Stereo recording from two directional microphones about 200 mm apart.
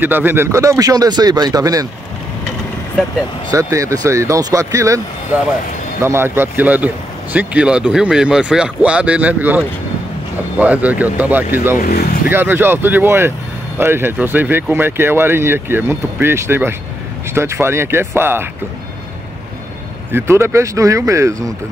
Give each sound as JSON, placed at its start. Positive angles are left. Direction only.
{"t": 0.0, "sound": "speech", "side_deg": -10}
{"t": 3.5, "sound": "speech", "side_deg": -15}
{"t": 6.0, "sound": "speech", "side_deg": -10}
{"t": 11.8, "sound": "speech", "side_deg": 50}
{"t": 12.3, "sound": "speech", "side_deg": -10}
{"t": 20.1, "sound": "speech", "side_deg": -10}